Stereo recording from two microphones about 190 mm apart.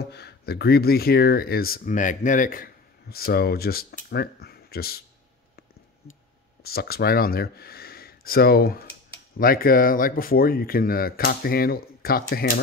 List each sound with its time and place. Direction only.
0.0 s speech: 60° left (ahead or behind)
6.6 s speech: 55° left (ahead or behind)